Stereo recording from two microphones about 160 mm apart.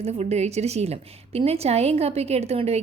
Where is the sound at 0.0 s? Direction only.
45° right (ahead or behind).